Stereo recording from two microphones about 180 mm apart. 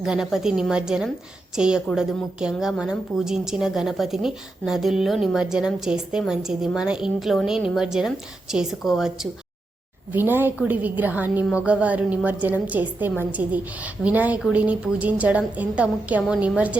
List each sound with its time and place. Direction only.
0.0 s a woman's voice: 5° right (ahead or behind)